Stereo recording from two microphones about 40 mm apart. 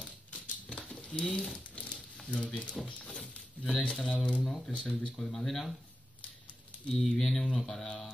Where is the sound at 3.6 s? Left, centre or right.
Centre.